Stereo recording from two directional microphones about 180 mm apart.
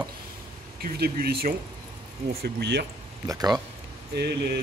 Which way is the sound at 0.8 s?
60° right (ahead or behind).